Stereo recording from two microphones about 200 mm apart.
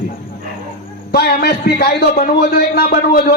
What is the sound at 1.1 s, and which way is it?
A man's voice, 50° left (ahead or behind).